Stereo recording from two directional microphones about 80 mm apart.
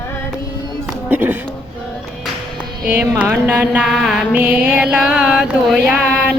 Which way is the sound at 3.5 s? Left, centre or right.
Centre.